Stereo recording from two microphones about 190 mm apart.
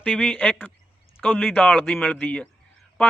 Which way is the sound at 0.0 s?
5° left (ahead or behind).